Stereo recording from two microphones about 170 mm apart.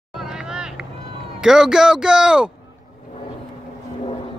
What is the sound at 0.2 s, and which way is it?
Vehicle, 5° right (ahead or behind).